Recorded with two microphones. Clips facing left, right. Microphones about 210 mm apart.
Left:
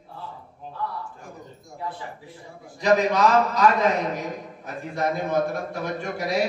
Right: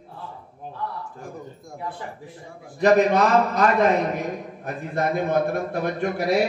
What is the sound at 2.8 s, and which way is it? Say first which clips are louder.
A man's voice: right 2 dB; 55° right (ahead or behind).